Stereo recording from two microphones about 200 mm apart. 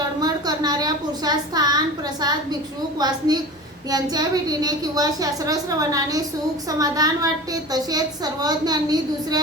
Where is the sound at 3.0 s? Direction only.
20° right (ahead or behind).